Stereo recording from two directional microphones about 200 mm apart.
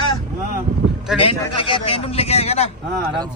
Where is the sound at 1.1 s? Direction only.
5° right (ahead or behind).